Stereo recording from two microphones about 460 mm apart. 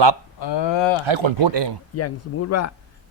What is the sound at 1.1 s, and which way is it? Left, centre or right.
Speech, right.